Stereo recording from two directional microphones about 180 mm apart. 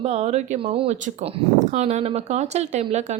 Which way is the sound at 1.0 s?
40° right (ahead or behind).